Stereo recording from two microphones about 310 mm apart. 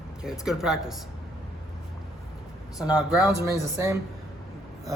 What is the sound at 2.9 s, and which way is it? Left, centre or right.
Speech, centre.